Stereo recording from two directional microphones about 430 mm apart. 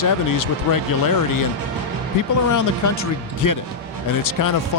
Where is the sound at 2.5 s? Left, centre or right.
Left.